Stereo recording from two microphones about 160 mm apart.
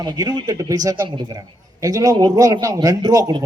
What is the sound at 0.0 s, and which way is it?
A man's voice, 25° right (ahead or behind).